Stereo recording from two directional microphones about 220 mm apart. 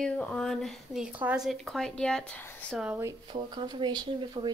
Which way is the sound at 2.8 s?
10° right (ahead or behind).